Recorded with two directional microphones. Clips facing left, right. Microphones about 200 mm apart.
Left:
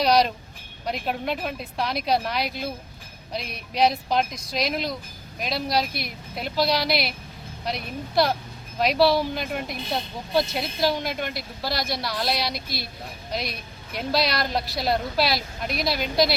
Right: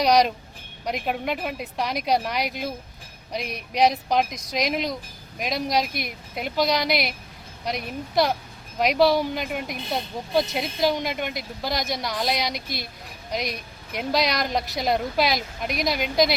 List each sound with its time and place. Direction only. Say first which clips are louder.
0.0 s speech: right 1 dB; 15° right (ahead or behind)
10.8 s speech: right 1 dB; 15° right (ahead or behind)